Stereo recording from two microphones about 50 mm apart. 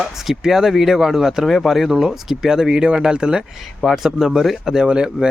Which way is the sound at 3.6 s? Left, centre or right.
Centre.